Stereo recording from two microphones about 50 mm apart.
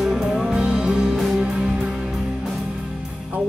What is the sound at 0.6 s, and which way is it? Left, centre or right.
Music, centre.